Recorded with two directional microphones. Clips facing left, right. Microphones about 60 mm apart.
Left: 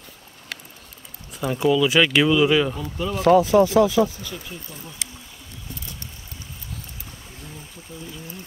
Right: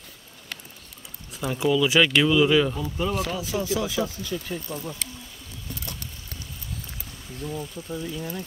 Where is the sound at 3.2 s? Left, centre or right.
Left.